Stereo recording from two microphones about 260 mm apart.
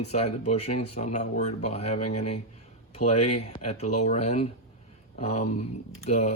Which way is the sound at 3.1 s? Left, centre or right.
Left.